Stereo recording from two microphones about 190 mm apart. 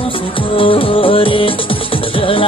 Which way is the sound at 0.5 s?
30° left (ahead or behind).